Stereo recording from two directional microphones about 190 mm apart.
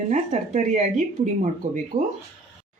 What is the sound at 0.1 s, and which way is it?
A woman's voice, 40° right (ahead or behind).